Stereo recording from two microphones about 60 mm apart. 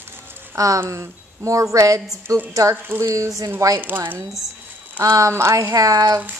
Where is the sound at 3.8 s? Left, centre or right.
Right.